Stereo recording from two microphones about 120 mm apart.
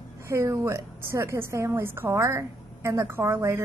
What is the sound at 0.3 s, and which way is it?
A woman's voice, 25° right (ahead or behind).